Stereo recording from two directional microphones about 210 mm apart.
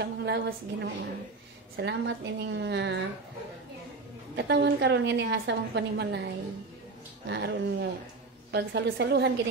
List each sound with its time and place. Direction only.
0.0 s a woman's voice: 55° right (ahead or behind)
4.4 s a woman's voice: 55° right (ahead or behind)